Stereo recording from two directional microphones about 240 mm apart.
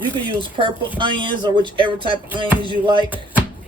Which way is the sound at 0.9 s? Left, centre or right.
Centre.